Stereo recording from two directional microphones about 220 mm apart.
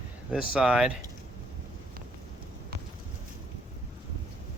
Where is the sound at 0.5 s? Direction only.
5° right (ahead or behind).